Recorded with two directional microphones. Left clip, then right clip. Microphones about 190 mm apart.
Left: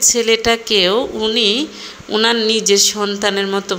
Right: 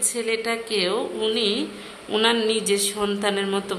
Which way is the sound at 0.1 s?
30° left (ahead or behind).